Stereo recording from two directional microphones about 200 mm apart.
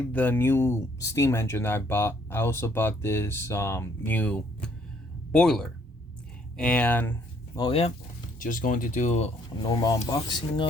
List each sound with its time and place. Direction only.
0.1 s speech: 10° left (ahead or behind)
7.5 s speech: 25° left (ahead or behind)
8.4 s speech: 40° left (ahead or behind)
9.6 s speech: 20° left (ahead or behind)